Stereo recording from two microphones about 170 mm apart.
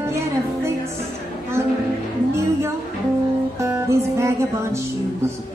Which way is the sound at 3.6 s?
15° right (ahead or behind).